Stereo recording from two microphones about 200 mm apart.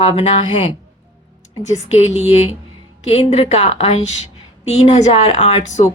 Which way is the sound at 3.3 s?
30° left (ahead or behind).